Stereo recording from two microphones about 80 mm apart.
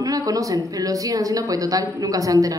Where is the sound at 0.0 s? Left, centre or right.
Right.